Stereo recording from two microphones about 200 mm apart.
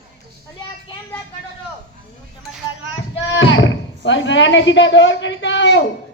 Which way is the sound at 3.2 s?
65° left (ahead or behind).